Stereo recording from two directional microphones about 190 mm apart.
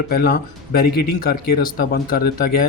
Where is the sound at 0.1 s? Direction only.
50° left (ahead or behind).